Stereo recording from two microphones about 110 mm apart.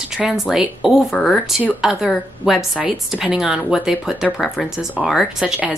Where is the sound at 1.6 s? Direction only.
5° right (ahead or behind).